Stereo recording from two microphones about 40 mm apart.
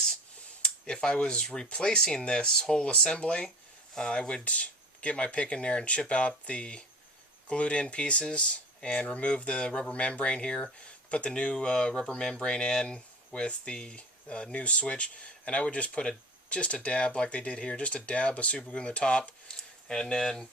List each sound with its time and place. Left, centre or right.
0.9 s speech: left
2.2 s speech: left
4.4 s speech: left; by 20.5 s centre